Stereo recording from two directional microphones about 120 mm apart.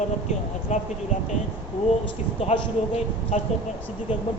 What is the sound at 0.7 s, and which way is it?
Speech, 75° left (ahead or behind).